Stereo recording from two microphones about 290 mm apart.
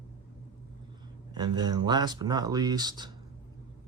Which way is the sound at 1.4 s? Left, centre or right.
Centre.